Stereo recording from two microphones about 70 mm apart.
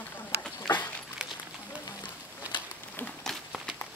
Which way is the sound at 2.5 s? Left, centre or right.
Right.